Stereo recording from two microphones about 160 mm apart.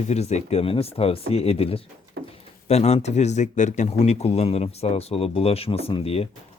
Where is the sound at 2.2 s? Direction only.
90° right.